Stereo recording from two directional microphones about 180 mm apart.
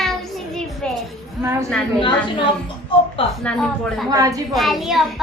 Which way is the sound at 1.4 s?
15° right (ahead or behind).